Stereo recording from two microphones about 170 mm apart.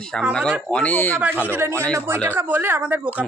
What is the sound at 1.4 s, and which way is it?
Speech, 15° right (ahead or behind).